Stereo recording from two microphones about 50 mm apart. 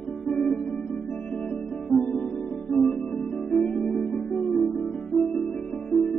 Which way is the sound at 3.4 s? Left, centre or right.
Centre.